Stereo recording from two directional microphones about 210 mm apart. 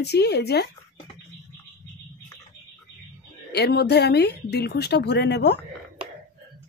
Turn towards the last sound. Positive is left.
turn(degrees=55)  # may be behind; listen again after turning